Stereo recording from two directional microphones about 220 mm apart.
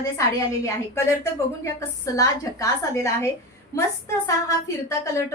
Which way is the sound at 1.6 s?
15° left (ahead or behind).